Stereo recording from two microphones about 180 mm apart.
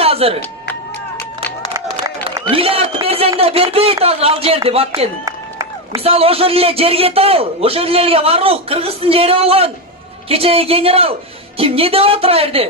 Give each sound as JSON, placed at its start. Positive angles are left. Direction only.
{"t": 0.0, "sound": "music", "side_deg": -35}
{"t": 2.5, "sound": "a man's voice", "side_deg": -30}